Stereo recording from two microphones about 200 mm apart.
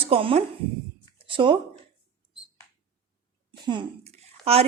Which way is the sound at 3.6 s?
25° right (ahead or behind).